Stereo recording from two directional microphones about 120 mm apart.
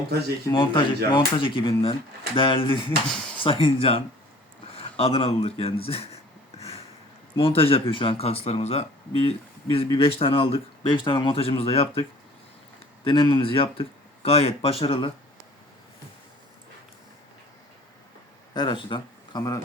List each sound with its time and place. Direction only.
0.5 s speech: 40° left (ahead or behind)
6.6 s a sound: 55° left (ahead or behind)
7.3 s speech: 50° left (ahead or behind)
13.1 s speech: 45° left (ahead or behind)
18.5 s speech: 35° left (ahead or behind)